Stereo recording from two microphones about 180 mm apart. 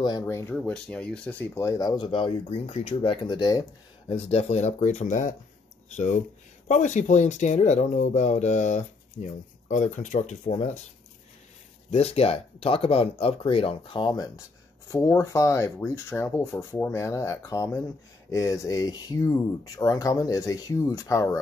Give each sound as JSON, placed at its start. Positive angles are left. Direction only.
{"t": 0.0, "sound": "speech", "side_deg": 20}
{"t": 4.1, "sound": "speech", "side_deg": 35}
{"t": 11.9, "sound": "speech", "side_deg": 35}